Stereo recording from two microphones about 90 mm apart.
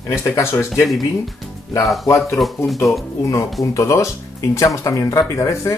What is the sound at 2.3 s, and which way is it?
Speech, centre (ahead or behind).